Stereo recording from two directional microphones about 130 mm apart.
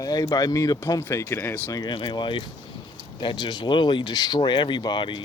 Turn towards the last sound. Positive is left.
turn(degrees=35)  # may be behind; listen again after turning